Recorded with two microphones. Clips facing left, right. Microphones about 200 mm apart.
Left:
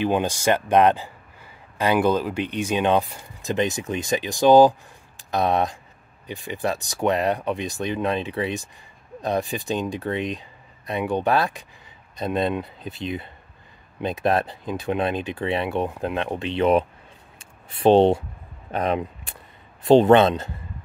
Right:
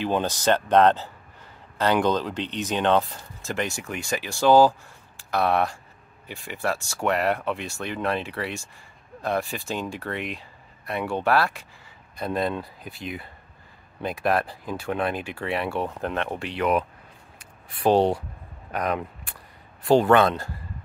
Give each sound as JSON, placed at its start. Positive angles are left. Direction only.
{"t": 0.0, "sound": "a man's voice", "side_deg": 15}
{"t": 17.4, "sound": "a sound", "side_deg": 25}
{"t": 18.7, "sound": "speech", "side_deg": 25}